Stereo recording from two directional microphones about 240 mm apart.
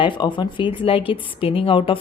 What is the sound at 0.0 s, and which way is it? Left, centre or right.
Speech, centre.